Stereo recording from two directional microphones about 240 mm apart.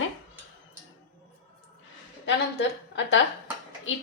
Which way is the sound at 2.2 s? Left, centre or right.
Left.